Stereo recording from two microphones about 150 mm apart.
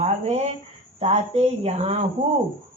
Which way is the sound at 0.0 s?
45° right (ahead or behind).